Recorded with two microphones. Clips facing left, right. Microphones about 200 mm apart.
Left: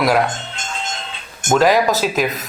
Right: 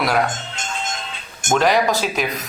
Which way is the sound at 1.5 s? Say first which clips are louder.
Left 3 dB; 5° left (ahead or behind).